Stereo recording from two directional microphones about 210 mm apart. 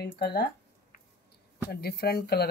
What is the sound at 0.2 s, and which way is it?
Speech, 50° left (ahead or behind).